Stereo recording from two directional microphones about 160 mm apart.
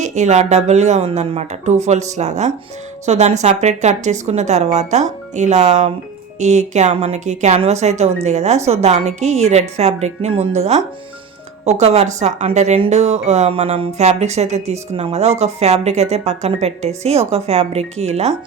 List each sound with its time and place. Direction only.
0.0 s speech: 50° right (ahead or behind)